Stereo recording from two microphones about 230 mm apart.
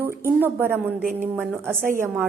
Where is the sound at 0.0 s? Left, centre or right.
Centre.